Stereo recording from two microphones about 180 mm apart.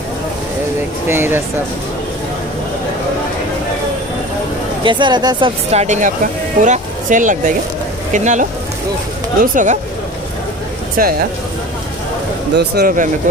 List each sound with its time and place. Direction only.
1.0 s speech: 10° right (ahead or behind)
4.8 s speech: 25° right (ahead or behind)
5.7 s speech: 40° right (ahead or behind)
11.0 s speech: 50° right (ahead or behind)
12.5 s speech: 60° right (ahead or behind)